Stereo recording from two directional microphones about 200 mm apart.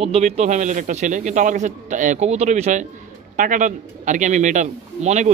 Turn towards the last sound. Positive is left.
turn(degrees=-35)  # may be behind; listen again after turning